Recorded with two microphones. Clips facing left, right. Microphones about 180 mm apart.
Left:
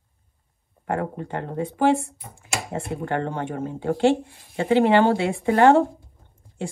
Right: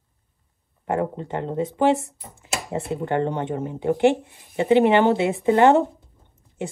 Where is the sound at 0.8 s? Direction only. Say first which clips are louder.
Right 2 dB; 20° right (ahead or behind).